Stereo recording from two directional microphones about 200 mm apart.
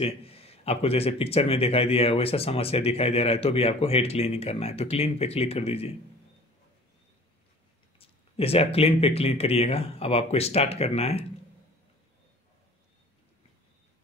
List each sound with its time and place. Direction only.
0.0 s a man's voice: 30° left (ahead or behind)
8.0 s speech: 30° left (ahead or behind)